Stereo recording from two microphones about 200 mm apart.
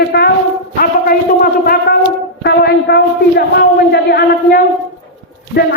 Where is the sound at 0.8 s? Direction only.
45° left (ahead or behind).